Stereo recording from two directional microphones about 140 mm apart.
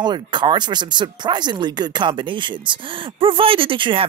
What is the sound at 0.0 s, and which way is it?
Speech, 35° right (ahead or behind).